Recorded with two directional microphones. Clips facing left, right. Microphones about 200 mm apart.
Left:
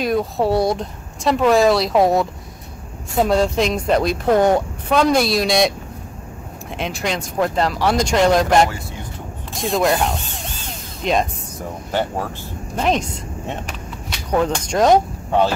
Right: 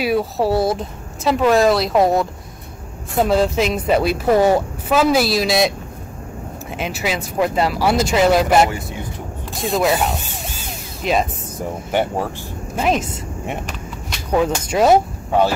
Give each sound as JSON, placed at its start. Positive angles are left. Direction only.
{"t": 0.0, "sound": "a woman's voice", "side_deg": -5}
{"t": 6.8, "sound": "a woman's voice", "side_deg": -5}
{"t": 11.9, "sound": "speech", "side_deg": -15}
{"t": 12.7, "sound": "speech", "side_deg": -5}